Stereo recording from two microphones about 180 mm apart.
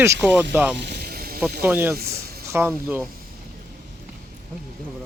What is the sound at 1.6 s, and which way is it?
Speech, 10° right (ahead or behind).